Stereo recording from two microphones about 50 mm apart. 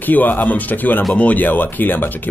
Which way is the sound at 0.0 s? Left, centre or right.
Left.